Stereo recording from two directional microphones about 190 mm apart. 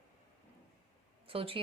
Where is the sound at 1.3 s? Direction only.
30° right (ahead or behind).